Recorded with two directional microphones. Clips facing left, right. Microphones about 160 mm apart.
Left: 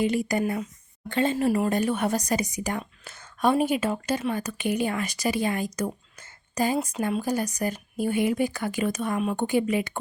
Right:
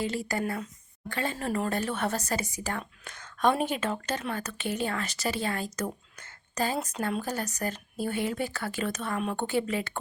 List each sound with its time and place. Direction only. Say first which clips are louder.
0.0 s speech: left 6 dB; 15° left (ahead or behind)